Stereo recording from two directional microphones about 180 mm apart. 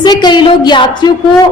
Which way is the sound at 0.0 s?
25° left (ahead or behind).